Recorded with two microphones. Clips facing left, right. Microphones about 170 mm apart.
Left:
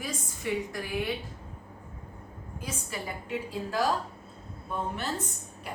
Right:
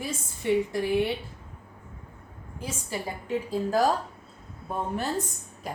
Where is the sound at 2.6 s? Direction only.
30° right (ahead or behind).